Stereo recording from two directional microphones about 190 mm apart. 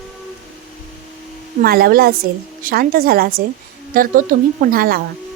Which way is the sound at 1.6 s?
55° right (ahead or behind).